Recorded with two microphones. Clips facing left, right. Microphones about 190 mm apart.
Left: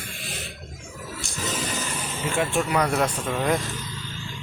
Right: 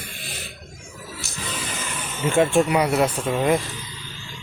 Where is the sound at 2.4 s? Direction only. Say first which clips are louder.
Right 6 dB; 25° right (ahead or behind).